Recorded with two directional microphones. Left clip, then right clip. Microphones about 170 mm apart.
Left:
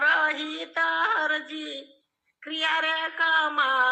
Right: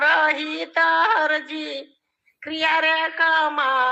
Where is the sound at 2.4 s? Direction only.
30° right (ahead or behind).